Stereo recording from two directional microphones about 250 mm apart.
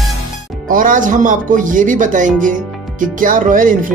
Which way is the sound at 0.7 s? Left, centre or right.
Right.